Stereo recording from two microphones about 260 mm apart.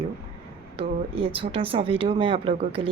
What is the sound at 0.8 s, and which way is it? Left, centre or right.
A woman's voice, right.